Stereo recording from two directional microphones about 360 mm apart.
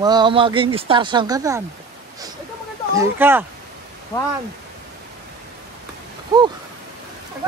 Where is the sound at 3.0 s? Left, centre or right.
Centre.